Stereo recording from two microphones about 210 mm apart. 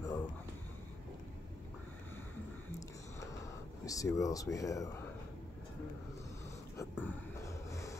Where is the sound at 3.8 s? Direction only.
15° left (ahead or behind).